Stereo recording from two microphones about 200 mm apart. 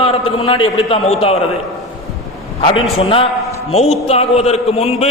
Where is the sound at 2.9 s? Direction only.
25° left (ahead or behind).